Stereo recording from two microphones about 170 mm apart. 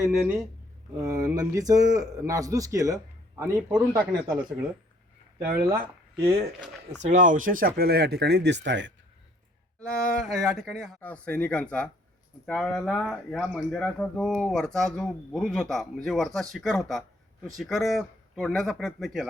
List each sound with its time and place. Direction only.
0.9 s speech: 20° right (ahead or behind)
5.5 s speech: 10° right (ahead or behind)
7.0 s speech: 45° right (ahead or behind)
7.8 s speech: 70° right (ahead or behind); by 8.9 s 90° right
9.8 s speech: 5° left (ahead or behind)